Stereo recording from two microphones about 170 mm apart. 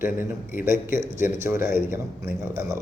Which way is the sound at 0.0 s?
15° right (ahead or behind).